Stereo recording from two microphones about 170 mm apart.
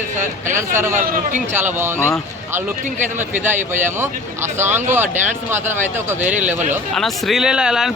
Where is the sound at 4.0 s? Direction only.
15° right (ahead or behind).